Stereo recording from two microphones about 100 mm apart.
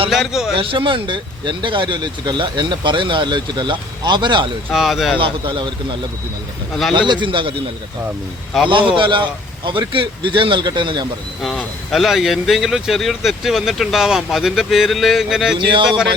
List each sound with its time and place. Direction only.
0.1 s a man's voice: 5° right (ahead or behind)
0.5 s speech: 60° right (ahead or behind)
4.7 s speech: 5° right (ahead or behind)
5.2 s speech: 55° right (ahead or behind)
7.1 s speech: 55° right (ahead or behind)
8.7 s speech: 55° right (ahead or behind)
11.4 s speech: centre (ahead or behind)
15.5 s speech: 55° right (ahead or behind)